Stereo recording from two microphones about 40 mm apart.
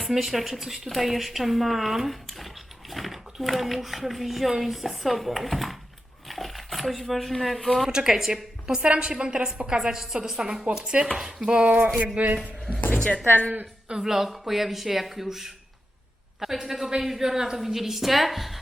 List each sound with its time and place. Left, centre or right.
0.0 s a child's voice: centre
6.2 s a sound: centre
7.4 s a child's voice: centre
7.9 s a woman's voice: centre
8.8 s a woman's voice: right
11.6 s a man's voice: right
12.4 s speech: centre
13.8 s speech: right
14.1 s a woman's voice: centre